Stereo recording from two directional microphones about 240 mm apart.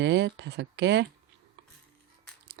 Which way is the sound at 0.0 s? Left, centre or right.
Right.